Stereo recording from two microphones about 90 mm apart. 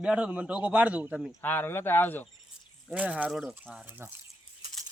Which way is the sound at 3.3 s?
5° right (ahead or behind).